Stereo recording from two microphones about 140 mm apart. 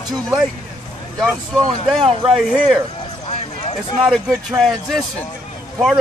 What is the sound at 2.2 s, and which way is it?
Speech, 5° right (ahead or behind).